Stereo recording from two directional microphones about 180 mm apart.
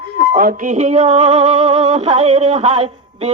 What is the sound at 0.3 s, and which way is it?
Music, 45° right (ahead or behind).